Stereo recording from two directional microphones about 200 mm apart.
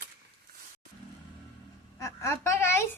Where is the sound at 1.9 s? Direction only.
15° left (ahead or behind).